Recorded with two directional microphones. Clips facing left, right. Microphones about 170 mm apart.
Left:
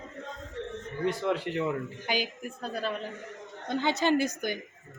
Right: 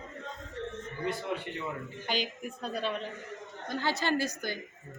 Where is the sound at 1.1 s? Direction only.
90° left.